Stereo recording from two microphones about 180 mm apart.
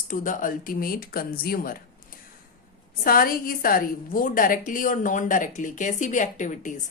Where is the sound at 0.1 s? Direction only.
45° left (ahead or behind).